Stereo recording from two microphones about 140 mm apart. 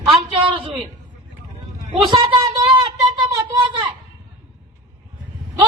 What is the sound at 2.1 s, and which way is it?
Speech, 30° right (ahead or behind).